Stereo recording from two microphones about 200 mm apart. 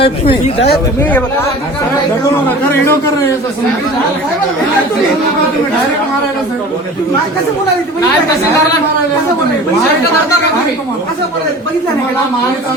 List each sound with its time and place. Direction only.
0.0 s speech: 30° left (ahead or behind)
2.6 s a man's voice: 10° left (ahead or behind)